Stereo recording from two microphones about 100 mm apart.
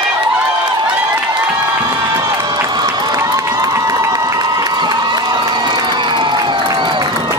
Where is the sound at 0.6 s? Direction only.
50° right (ahead or behind).